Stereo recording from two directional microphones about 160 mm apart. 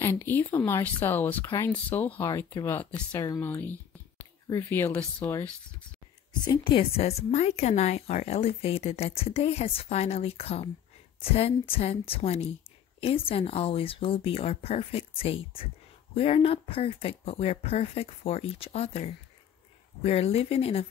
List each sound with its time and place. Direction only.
0.0 s speech: 15° left (ahead or behind)
6.4 s a woman's voice: 30° left (ahead or behind)